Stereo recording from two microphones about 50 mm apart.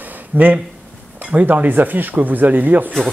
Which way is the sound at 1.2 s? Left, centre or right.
Right.